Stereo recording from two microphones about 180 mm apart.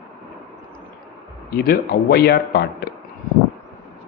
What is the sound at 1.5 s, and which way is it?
Speech, 60° left (ahead or behind).